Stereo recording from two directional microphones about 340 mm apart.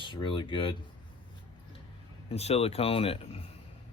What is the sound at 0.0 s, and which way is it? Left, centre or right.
Speech, centre.